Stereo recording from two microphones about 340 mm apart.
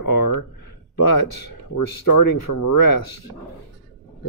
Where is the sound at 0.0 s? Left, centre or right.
Left.